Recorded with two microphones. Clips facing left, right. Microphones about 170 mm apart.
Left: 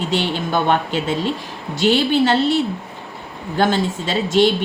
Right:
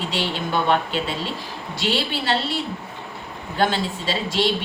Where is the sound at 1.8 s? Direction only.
45° left (ahead or behind).